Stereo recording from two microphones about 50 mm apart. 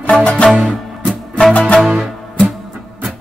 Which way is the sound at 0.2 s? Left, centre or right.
Left.